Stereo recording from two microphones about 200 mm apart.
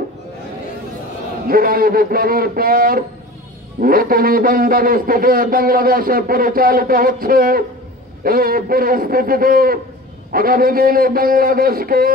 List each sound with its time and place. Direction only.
1.5 s speech: 45° right (ahead or behind)